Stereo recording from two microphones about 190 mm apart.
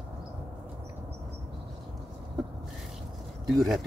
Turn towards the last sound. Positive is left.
turn(degrees=0)  # may be behind; listen again after turning